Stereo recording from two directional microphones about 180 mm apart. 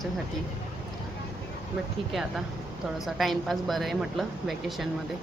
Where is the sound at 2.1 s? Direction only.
Centre (ahead or behind).